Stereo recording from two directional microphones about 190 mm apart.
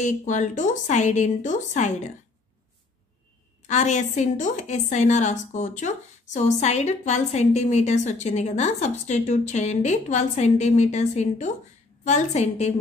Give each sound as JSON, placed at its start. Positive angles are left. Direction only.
{"t": 0.0, "sound": "a woman's voice", "side_deg": 40}
{"t": 3.6, "sound": "a woman's voice", "side_deg": 40}